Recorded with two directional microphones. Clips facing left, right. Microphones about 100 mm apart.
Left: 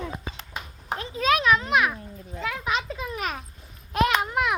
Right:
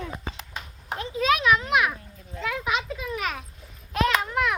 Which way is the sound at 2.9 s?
35° left (ahead or behind).